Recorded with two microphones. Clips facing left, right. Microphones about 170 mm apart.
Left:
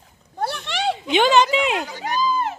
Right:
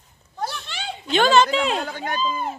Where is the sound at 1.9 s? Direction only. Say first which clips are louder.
Left 3 dB; 55° right (ahead or behind).